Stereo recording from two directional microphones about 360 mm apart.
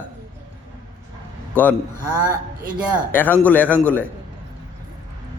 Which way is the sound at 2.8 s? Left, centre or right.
Centre.